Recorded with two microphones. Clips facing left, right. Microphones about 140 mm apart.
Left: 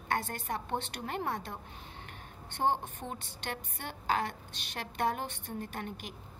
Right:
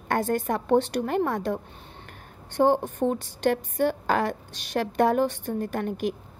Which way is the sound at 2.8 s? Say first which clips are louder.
Right 15 dB; 40° right (ahead or behind).